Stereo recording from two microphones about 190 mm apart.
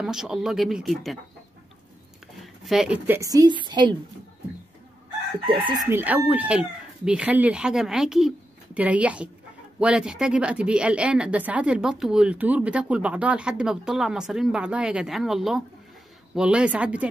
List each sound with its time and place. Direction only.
0.0 s a woman's voice: 5° right (ahead or behind)
2.4 s speech: centre (ahead or behind); by 3.9 s 25° right (ahead or behind)
5.5 s chicken: 25° right (ahead or behind)
5.9 s a woman's voice: 10° right (ahead or behind)